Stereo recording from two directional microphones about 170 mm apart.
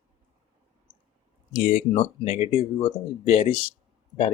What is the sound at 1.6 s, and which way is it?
Speech, 55° left (ahead or behind).